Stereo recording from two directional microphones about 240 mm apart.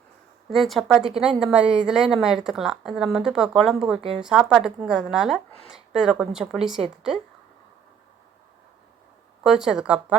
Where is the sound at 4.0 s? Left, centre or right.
Right.